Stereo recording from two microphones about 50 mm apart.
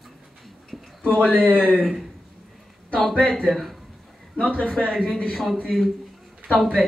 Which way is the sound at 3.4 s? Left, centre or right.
Centre.